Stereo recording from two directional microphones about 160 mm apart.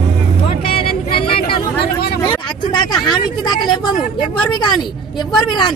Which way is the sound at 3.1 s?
25° left (ahead or behind).